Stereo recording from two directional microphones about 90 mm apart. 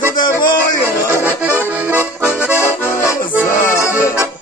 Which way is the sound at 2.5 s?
30° left (ahead or behind).